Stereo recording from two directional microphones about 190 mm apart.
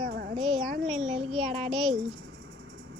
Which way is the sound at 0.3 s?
Centre (ahead or behind).